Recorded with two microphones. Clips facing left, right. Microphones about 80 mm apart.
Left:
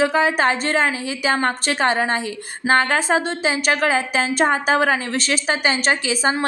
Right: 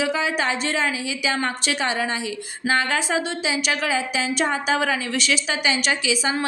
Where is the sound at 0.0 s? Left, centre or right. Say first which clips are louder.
Left 5 dB; left.